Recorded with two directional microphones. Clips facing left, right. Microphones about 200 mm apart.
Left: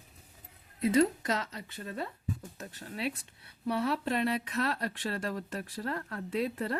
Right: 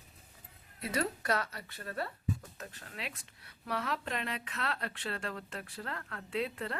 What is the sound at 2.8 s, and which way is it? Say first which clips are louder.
Speech: left 12 dB; 35° left (ahead or behind).